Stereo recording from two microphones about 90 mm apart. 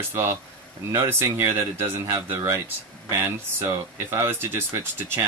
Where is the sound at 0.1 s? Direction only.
25° right (ahead or behind).